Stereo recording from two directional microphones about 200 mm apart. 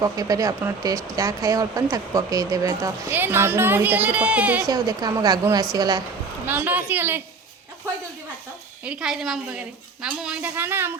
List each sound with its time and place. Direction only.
0.0 s speech: 15° right (ahead or behind)
4.7 s a woman's voice: 20° right (ahead or behind)
8.8 s a woman's voice: 5° right (ahead or behind)